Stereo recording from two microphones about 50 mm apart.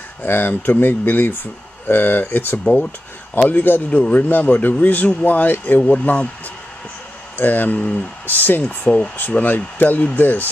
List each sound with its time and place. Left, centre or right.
0.2 s speech: left
2.6 s speech: centre
3.3 s speech: left
3.9 s speech: left
4.3 s speech: left
7.3 s speech: left